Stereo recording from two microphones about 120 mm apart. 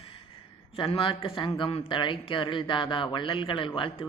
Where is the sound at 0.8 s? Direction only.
50° left (ahead or behind).